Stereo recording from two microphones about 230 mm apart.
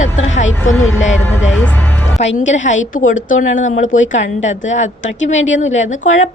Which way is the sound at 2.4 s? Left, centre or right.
Left.